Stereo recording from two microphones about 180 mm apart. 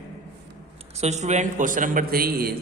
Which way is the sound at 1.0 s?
40° right (ahead or behind).